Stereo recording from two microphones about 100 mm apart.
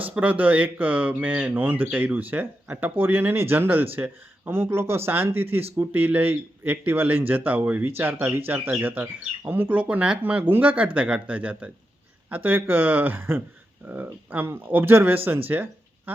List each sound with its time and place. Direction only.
0.1 s speech: 15° right (ahead or behind)